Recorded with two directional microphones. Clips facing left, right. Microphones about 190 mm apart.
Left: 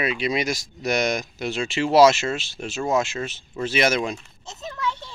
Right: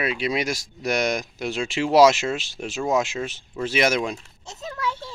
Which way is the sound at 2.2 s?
Centre (ahead or behind).